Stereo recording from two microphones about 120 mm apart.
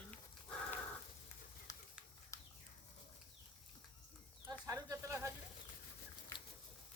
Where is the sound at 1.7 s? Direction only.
30° left (ahead or behind).